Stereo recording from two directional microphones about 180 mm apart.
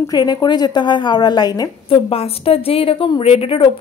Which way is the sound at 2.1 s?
35° left (ahead or behind).